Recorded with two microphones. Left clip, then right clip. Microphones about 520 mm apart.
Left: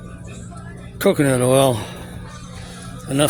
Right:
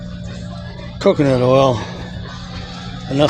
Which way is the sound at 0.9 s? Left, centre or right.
Left.